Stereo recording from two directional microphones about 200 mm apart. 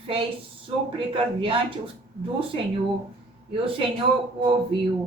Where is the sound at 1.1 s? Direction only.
25° right (ahead or behind).